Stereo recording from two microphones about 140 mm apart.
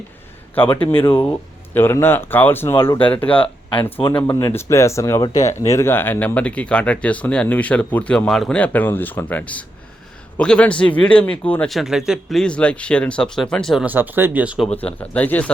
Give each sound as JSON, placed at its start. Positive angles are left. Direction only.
{"t": 0.5, "sound": "speech", "side_deg": 15}
{"t": 4.4, "sound": "speech", "side_deg": 20}
{"t": 11.7, "sound": "speech", "side_deg": 0}
{"t": 13.8, "sound": "speech", "side_deg": -15}
{"t": 14.8, "sound": "speech", "side_deg": 10}